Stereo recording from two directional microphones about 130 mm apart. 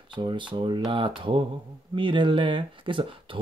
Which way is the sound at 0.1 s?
40° right (ahead or behind).